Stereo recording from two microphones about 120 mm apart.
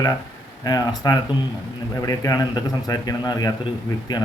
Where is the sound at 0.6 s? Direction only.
30° left (ahead or behind).